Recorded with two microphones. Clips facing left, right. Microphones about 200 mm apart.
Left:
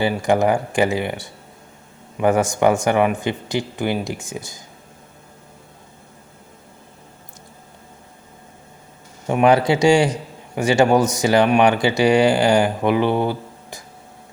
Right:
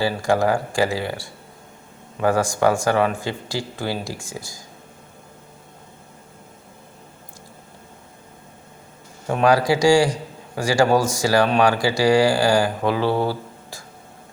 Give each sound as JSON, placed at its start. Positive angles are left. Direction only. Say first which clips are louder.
{"t": 0.0, "sound": "a man's voice", "louder": "left 2 dB", "side_deg": 20}
{"t": 9.2, "sound": "a man's voice", "louder": "left 2 dB", "side_deg": 20}